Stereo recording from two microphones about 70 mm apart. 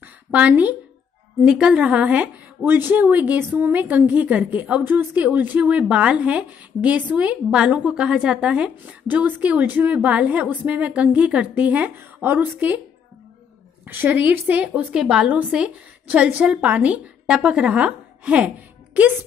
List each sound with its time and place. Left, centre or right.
0.0 s a sound: right
1.4 s speech: centre
9.0 s speech: right
14.1 s speech: right
15.0 s a woman's voice: centre